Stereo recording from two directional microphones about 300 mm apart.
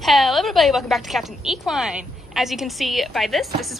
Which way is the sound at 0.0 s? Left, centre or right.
Centre.